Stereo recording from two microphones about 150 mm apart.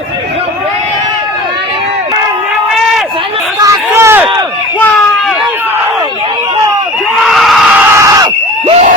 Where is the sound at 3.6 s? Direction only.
20° right (ahead or behind).